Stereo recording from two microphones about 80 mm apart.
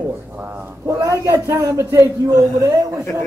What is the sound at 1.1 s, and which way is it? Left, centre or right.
A man's voice, right.